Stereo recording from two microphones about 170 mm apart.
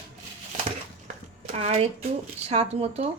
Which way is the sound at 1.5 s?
35° right (ahead or behind).